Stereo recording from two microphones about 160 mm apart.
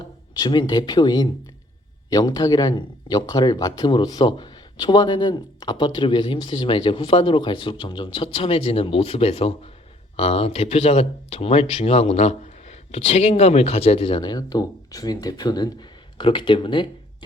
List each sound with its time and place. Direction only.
0.3 s speech: 25° left (ahead or behind)